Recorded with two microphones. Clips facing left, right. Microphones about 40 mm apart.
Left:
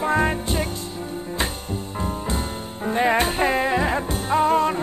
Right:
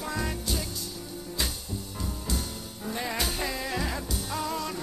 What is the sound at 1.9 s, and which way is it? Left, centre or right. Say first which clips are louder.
Music: left 8 dB; left.